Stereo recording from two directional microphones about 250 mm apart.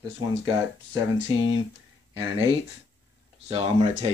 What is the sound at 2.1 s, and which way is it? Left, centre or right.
Speech, centre.